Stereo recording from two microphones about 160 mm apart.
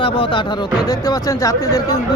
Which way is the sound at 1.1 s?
20° left (ahead or behind).